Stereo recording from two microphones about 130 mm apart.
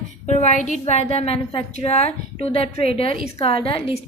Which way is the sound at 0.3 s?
60° left (ahead or behind).